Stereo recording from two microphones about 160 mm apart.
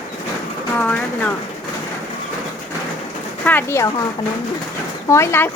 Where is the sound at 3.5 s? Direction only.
15° left (ahead or behind).